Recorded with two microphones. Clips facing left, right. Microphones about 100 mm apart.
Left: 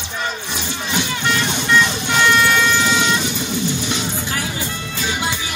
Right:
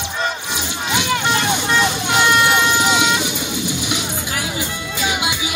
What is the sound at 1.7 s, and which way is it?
Vehicle, 45° right (ahead or behind).